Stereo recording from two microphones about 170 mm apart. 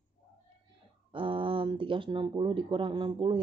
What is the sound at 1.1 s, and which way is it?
Speech, 30° right (ahead or behind).